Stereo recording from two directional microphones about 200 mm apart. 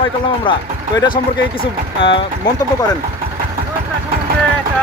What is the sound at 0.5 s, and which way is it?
Speech, 25° left (ahead or behind).